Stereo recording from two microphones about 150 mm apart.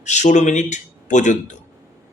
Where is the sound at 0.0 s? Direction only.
55° left (ahead or behind).